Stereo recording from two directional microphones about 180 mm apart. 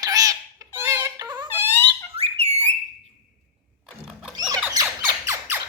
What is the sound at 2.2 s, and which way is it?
Bird, 35° right (ahead or behind).